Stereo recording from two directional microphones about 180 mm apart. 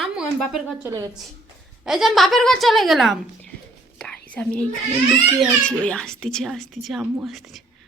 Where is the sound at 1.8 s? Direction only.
Centre (ahead or behind).